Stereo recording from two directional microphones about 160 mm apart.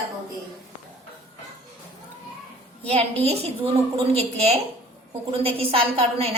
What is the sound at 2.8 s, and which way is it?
A woman's voice, 40° right (ahead or behind).